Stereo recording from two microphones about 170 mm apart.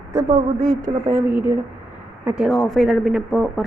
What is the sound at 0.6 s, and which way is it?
Speech, 55° right (ahead or behind).